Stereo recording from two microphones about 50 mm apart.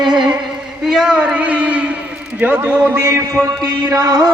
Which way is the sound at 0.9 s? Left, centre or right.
Centre.